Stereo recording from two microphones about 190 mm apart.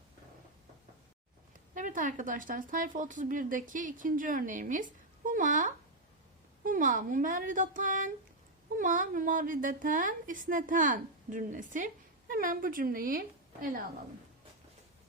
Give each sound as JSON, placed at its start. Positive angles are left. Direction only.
{"t": 1.7, "sound": "speech", "side_deg": -45}